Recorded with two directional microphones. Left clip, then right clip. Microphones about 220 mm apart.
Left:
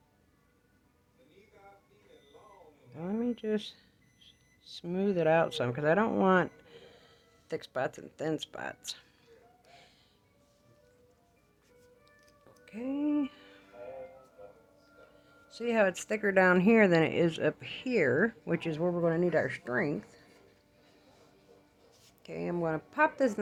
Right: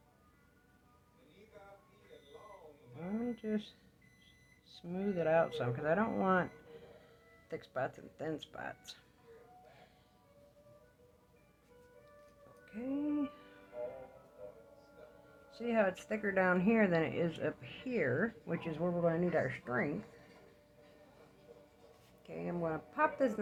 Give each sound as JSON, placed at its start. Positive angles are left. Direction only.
{"t": 3.1, "sound": "a sound", "side_deg": 55}
{"t": 4.2, "sound": "speech", "side_deg": 50}
{"t": 12.6, "sound": "speech", "side_deg": 50}
{"t": 15.4, "sound": "speech", "side_deg": 50}
{"t": 22.2, "sound": "speech", "side_deg": 45}